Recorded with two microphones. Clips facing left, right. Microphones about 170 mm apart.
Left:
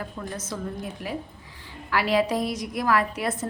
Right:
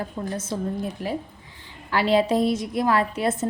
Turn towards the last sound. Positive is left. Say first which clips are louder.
# right 3 dB
turn(degrees=-25)  # may be behind; listen again after turning